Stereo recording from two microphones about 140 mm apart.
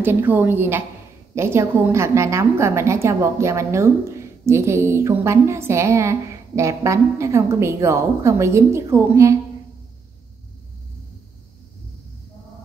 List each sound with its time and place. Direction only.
0.0 s a woman's voice: 15° right (ahead or behind)